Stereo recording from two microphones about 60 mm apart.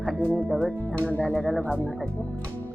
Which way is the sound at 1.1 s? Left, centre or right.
Left.